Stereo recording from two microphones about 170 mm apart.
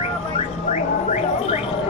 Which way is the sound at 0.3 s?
40° left (ahead or behind).